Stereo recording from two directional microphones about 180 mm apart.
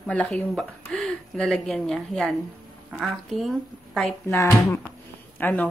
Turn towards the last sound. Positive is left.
turn(degrees=10)  # may be behind; listen again after turning